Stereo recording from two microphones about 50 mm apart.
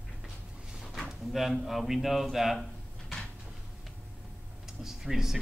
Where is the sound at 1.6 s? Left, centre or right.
Centre.